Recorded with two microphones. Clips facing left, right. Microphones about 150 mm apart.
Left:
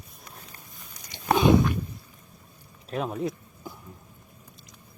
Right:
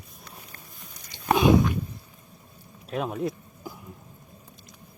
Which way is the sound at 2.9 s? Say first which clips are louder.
Right 1 dB; centre (ahead or behind).